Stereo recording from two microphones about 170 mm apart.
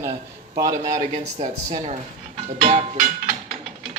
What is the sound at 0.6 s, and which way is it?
Speech, 20° right (ahead or behind).